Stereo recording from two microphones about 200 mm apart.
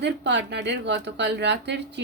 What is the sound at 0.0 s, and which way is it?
Speech, 60° right (ahead or behind).